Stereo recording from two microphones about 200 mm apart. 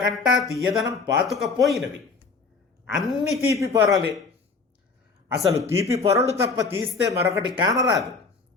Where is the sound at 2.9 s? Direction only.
Centre (ahead or behind).